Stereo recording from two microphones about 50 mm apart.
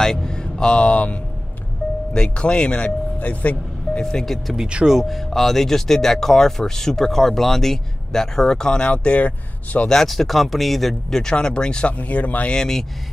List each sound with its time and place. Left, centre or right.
0.0 s speech: centre
3.2 s speech: left
4.0 s speech: centre
4.6 s speech: centre
4.9 s speech: centre; by 9.8 s left
9.8 s speech: centre
12.0 s speech: left
12.4 s speech: centre